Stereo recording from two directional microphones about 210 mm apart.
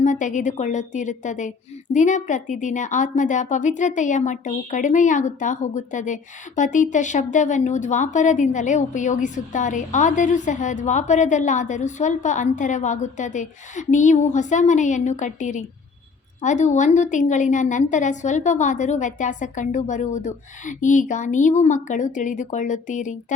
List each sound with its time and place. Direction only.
0.0 s speech: 35° left (ahead or behind)